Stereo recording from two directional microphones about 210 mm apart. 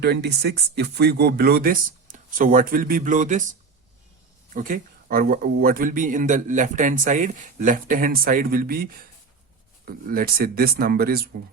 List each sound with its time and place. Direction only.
0.0 s speech: 50° right (ahead or behind)
4.5 s speech: 40° right (ahead or behind)